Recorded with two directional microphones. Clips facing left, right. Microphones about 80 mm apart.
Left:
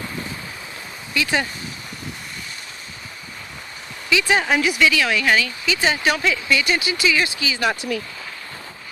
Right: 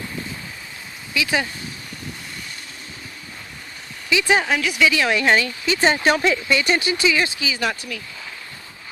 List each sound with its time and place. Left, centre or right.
1.1 s speech: centre
4.1 s speech: right
4.4 s speech: centre
4.9 s speech: right
7.8 s speech: left